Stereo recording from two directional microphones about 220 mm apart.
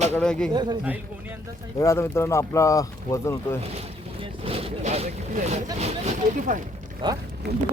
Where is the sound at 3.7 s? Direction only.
25° right (ahead or behind).